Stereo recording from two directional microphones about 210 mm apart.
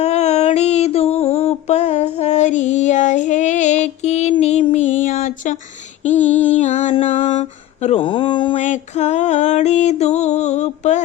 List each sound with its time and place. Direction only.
0.0 s music: 30° left (ahead or behind)
6.6 s mantra: 35° left (ahead or behind)